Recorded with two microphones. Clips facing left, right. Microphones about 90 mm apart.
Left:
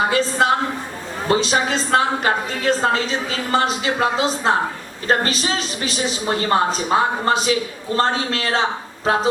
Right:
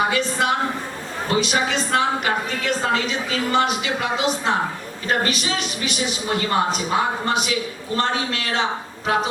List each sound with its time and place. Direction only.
0.1 s a woman's voice: 30° left (ahead or behind)